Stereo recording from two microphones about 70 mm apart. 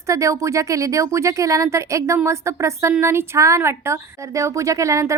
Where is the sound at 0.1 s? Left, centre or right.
Right.